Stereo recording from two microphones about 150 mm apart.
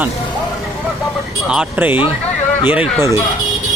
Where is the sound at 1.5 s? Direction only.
10° right (ahead or behind).